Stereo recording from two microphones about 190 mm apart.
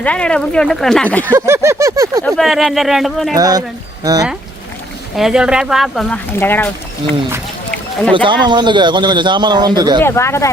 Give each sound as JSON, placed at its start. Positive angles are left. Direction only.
{"t": 0.0, "sound": "speech", "side_deg": 5}
{"t": 1.3, "sound": "a sound", "side_deg": -15}
{"t": 2.2, "sound": "speech", "side_deg": 0}
{"t": 3.3, "sound": "a man's voice", "side_deg": -20}
{"t": 5.1, "sound": "speech", "side_deg": -5}
{"t": 8.1, "sound": "a man's voice", "side_deg": -25}
{"t": 10.0, "sound": "speech", "side_deg": 15}